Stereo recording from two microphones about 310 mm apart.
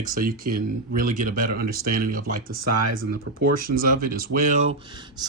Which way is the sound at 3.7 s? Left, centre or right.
Right.